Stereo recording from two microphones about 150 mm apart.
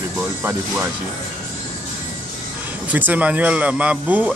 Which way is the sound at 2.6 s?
10° right (ahead or behind).